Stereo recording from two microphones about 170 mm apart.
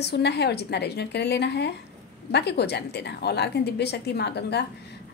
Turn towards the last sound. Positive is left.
turn(degrees=75)  # may be behind; listen again after turning